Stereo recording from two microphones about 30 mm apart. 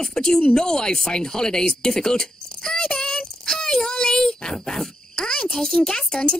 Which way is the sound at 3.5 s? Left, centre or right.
Centre.